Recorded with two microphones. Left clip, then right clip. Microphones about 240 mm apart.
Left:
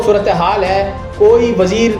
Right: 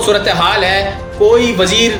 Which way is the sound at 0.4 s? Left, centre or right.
Centre.